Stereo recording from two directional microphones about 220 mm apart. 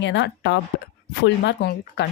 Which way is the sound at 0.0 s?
50° left (ahead or behind).